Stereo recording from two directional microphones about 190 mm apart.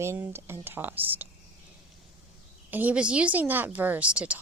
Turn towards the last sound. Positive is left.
turn(degrees=-5)  # may be behind; listen again after turning